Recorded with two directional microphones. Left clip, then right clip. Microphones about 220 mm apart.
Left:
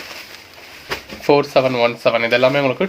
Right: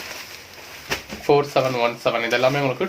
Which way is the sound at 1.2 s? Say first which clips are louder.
Left 4 dB; 45° left (ahead or behind).